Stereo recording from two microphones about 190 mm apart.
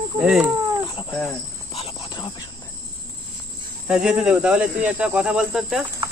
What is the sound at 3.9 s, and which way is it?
Cricket, 5° right (ahead or behind).